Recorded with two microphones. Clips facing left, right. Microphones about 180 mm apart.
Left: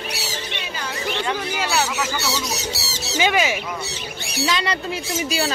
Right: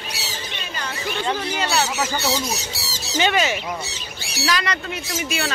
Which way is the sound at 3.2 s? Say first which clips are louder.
Even; 10° left (ahead or behind).